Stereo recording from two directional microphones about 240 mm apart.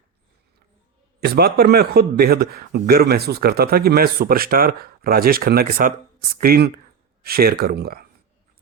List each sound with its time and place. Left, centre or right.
1.2 s speech: right